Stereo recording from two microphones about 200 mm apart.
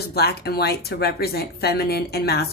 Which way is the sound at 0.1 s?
55° left (ahead or behind).